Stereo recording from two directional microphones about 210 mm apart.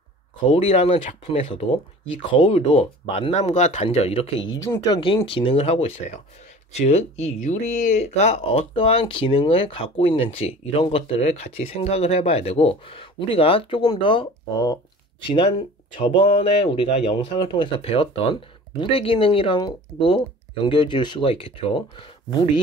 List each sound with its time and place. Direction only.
0.5 s speech: 30° left (ahead or behind)
4.6 s speech: 15° left (ahead or behind)